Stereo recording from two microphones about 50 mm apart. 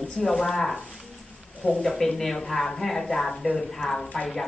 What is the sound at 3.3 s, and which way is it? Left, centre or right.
Speech, centre.